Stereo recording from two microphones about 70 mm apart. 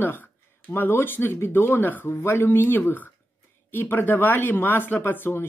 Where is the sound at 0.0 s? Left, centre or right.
Left.